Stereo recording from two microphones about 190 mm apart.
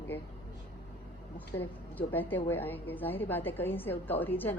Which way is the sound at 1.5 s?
10° left (ahead or behind).